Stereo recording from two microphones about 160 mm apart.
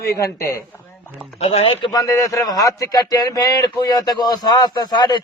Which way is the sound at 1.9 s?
20° left (ahead or behind).